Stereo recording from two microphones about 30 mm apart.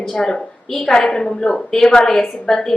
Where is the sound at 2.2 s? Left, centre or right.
Centre.